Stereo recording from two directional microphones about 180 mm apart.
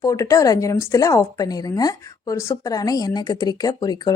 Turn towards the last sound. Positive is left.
turn(degrees=20)  # may be behind; listen again after turning